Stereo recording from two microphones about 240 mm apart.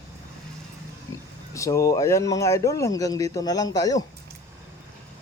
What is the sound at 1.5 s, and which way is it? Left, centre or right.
Speech, centre.